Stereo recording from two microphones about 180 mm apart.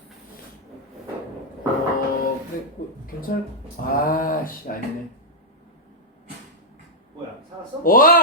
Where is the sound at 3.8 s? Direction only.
50° left (ahead or behind).